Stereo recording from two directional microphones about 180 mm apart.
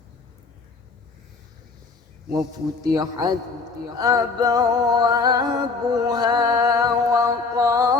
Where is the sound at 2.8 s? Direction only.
20° right (ahead or behind).